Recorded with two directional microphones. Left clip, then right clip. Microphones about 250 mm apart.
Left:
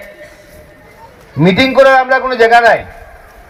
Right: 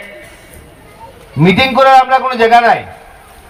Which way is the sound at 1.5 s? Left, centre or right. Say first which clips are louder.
Right 1 dB; right.